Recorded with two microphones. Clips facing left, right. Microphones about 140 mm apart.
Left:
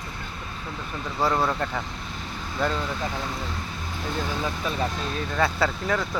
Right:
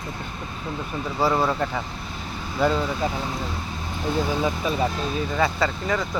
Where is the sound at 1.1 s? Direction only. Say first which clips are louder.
Right 2 dB; 5° right (ahead or behind).